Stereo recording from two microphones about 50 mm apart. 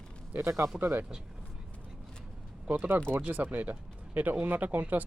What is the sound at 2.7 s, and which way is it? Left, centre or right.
Speech, right.